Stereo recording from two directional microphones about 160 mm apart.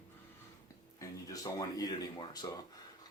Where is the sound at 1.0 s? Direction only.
20° left (ahead or behind).